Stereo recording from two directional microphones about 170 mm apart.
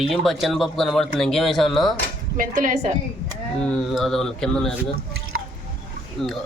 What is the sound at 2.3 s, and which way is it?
Speech, 50° right (ahead or behind).